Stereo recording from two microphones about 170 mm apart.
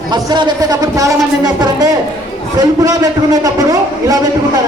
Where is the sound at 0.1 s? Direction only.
25° right (ahead or behind).